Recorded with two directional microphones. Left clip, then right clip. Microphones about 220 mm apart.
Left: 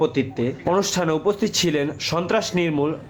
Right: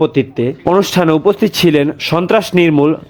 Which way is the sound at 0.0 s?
35° right (ahead or behind).